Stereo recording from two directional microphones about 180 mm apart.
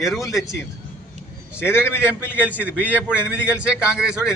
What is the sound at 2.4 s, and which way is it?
A man's voice, 10° right (ahead or behind).